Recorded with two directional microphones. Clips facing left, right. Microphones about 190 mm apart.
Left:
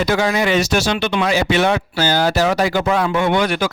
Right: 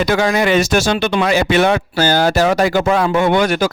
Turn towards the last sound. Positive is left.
turn(degrees=-45)  # may be behind; listen again after turning